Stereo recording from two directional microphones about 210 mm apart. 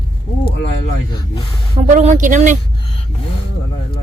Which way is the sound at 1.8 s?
35° right (ahead or behind).